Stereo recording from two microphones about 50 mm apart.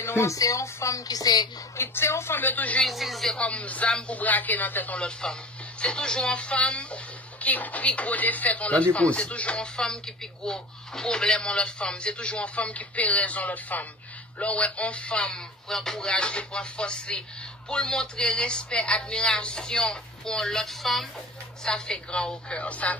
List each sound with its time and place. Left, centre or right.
0.0 s speech: left
1.8 s a woman's voice: left
2.3 s speech: left
2.8 s speech: centre
3.3 s speech: left
4.9 s a woman's voice: centre
21.6 s speech: centre